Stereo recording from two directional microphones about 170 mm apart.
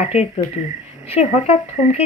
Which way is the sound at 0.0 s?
35° left (ahead or behind).